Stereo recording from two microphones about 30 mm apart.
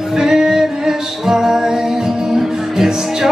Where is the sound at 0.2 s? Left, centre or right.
Centre.